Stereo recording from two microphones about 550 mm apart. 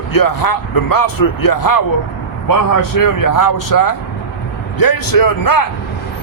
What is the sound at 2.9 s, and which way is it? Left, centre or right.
A man's voice, left.